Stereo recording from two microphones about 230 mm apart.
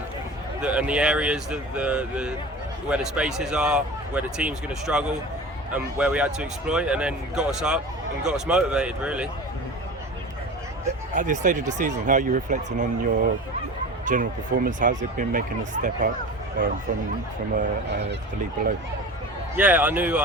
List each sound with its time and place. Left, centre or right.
0.6 s speech: centre
11.1 s speech: right
17.5 s speech: right
19.5 s speech: centre